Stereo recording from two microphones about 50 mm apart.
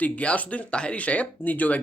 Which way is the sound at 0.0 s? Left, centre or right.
Left.